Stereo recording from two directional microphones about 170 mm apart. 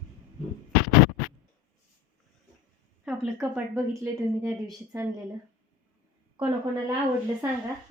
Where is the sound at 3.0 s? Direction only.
5° right (ahead or behind).